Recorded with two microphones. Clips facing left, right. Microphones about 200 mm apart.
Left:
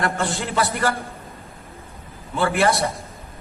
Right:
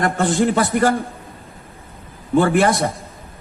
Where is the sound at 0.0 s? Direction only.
50° right (ahead or behind).